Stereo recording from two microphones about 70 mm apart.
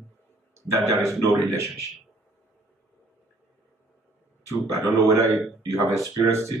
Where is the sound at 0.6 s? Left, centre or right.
Right.